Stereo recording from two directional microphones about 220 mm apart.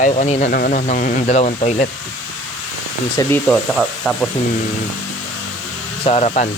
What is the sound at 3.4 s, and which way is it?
Speech, centre (ahead or behind).